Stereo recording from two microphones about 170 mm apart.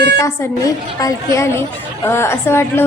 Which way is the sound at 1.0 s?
15° left (ahead or behind).